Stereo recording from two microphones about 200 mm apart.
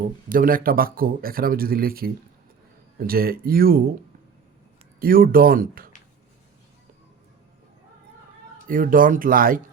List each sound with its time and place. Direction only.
0.3 s speech: 45° right (ahead or behind)
4.9 s speech: 45° right (ahead or behind)
8.6 s speech: 45° right (ahead or behind)